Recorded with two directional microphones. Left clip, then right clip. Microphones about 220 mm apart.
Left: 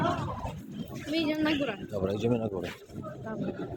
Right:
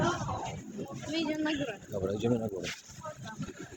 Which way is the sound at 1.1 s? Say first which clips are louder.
Left 4 dB; 45° left (ahead or behind).